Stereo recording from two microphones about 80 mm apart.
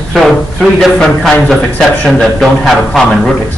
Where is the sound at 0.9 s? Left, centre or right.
Centre.